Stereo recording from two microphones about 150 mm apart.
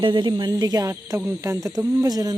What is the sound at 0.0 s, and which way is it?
Speech, 30° right (ahead or behind).